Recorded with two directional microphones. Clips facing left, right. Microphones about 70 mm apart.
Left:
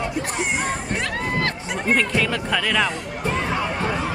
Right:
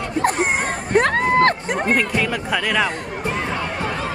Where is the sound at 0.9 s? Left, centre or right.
Right.